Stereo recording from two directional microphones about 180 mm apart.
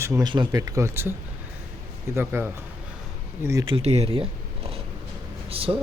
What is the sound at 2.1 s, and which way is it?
Speech, 15° right (ahead or behind).